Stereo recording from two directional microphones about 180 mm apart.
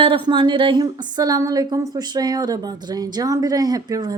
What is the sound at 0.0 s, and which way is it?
A woman's voice, 25° right (ahead or behind).